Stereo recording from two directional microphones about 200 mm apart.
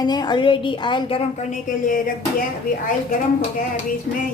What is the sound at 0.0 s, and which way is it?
A woman's voice, 20° left (ahead or behind).